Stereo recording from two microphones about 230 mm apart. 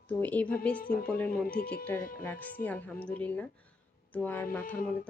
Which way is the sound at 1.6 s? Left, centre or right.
Left.